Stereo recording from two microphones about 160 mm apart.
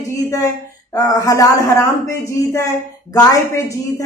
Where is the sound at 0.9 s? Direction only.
25° left (ahead or behind).